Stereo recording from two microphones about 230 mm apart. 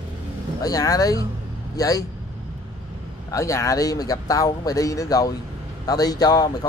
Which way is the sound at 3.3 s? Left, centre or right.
Centre.